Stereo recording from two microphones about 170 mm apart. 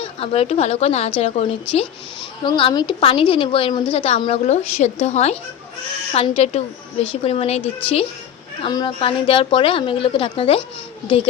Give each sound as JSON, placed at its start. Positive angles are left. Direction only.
{"t": 0.0, "sound": "a woman's voice", "side_deg": 35}
{"t": 8.6, "sound": "a woman's voice", "side_deg": 25}